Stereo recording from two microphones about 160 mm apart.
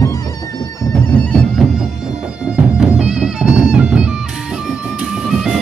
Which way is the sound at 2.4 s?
5° right (ahead or behind).